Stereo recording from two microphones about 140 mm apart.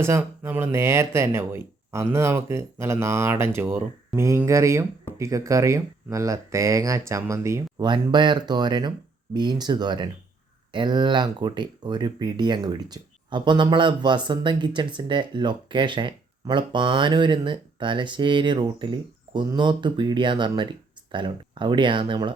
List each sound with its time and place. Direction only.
0.0 s speech: 20° right (ahead or behind)
7.9 s speech: 35° right (ahead or behind)